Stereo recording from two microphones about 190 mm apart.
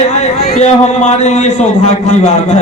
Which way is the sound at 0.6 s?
35° left (ahead or behind).